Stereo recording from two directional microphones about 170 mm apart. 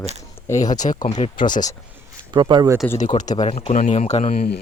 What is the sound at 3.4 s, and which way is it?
Speech, 40° left (ahead or behind).